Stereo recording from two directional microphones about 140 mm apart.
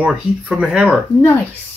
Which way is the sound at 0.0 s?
5° right (ahead or behind).